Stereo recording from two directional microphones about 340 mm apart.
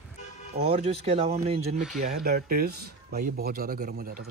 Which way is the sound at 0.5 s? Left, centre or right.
Centre.